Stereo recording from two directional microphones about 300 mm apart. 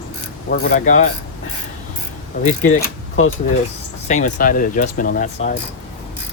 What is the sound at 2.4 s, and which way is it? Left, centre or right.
Speech, left.